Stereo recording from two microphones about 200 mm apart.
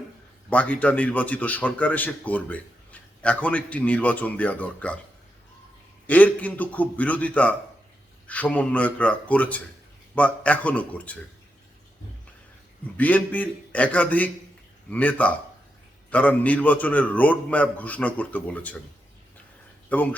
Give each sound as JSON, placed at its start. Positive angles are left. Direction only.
{"t": 0.5, "sound": "a man's voice", "side_deg": 10}
{"t": 6.1, "sound": "a man's voice", "side_deg": 10}
{"t": 13.0, "sound": "a man's voice", "side_deg": 10}
{"t": 19.9, "sound": "a man's voice", "side_deg": 10}